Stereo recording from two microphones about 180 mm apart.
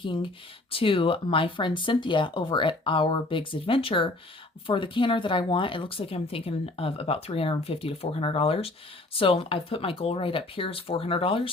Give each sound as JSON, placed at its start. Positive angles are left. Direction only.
{"t": 0.0, "sound": "speech", "side_deg": 25}